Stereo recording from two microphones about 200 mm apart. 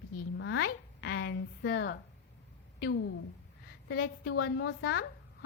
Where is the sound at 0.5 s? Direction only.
55° left (ahead or behind).